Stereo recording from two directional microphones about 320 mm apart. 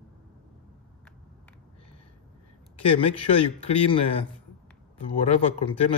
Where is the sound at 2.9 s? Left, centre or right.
Centre.